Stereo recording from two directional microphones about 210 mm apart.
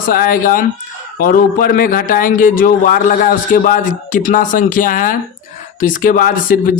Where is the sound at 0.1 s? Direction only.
45° left (ahead or behind).